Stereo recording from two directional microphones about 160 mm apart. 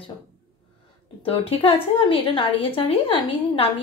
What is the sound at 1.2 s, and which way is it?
A woman's voice, 35° left (ahead or behind).